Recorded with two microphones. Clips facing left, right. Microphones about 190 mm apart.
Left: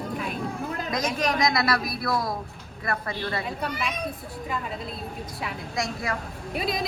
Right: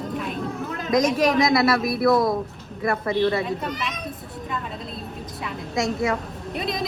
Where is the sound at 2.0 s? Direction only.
25° right (ahead or behind).